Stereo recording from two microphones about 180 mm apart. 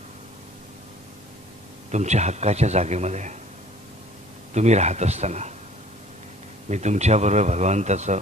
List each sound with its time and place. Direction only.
1.9 s speech: 40° right (ahead or behind)
4.6 s speech: 40° right (ahead or behind)
6.7 s speech: 40° right (ahead or behind)